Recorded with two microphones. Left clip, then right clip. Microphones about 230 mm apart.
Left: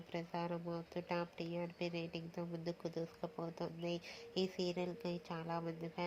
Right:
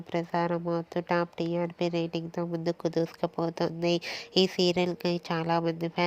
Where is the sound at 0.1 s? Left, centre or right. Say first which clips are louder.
Right 14 dB; right.